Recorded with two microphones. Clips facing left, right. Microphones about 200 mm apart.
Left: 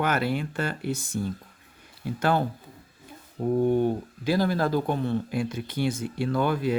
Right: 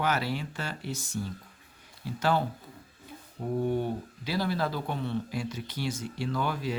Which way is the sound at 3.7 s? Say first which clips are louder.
Left 6 dB; 50° left (ahead or behind).